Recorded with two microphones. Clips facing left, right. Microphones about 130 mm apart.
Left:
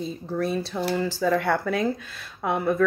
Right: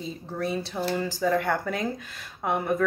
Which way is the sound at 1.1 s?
15° right (ahead or behind).